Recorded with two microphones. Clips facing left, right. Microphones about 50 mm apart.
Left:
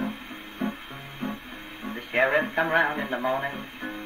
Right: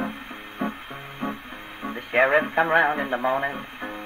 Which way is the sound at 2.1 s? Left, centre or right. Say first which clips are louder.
Right 3 dB; centre.